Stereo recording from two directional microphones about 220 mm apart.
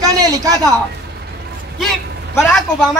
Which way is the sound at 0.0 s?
15° right (ahead or behind).